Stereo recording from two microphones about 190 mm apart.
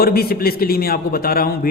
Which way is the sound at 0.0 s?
55° left (ahead or behind).